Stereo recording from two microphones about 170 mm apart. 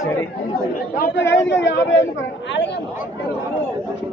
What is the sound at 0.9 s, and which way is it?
Speech, 70° left (ahead or behind).